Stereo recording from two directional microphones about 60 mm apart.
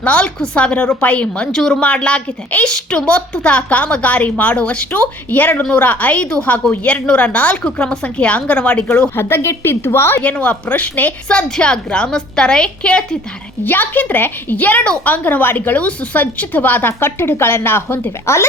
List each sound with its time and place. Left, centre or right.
0.0 s speech: centre
1.8 s a woman's voice: centre
9.1 s a woman's voice: left
10.2 s a woman's voice: left
11.3 s speech: centre
13.7 s speech: left